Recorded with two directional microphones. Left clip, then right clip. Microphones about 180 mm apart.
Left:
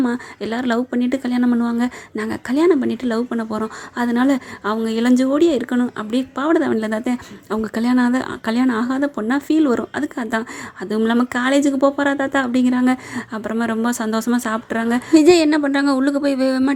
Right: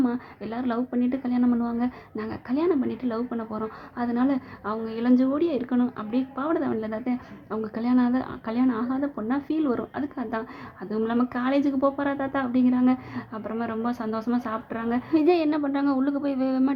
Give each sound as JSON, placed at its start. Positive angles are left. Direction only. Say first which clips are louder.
{"t": 0.0, "sound": "a woman's voice", "louder": "left 6 dB", "side_deg": 35}